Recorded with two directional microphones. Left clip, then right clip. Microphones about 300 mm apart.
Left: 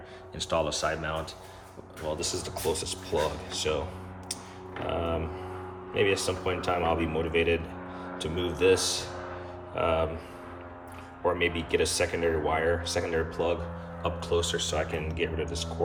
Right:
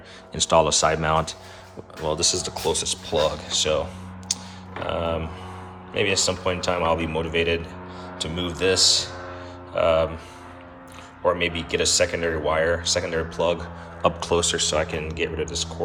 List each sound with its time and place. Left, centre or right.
0.3 s speech: centre
4.9 s speech: centre
11.2 s speech: centre
14.0 s speech: centre